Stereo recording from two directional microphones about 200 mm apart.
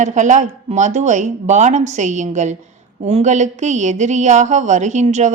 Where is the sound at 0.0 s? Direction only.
35° right (ahead or behind).